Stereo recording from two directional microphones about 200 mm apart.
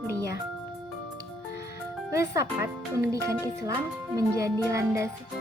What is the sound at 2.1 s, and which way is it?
Speech, 15° right (ahead or behind).